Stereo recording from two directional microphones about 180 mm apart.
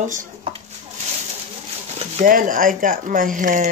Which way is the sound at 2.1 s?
50° right (ahead or behind).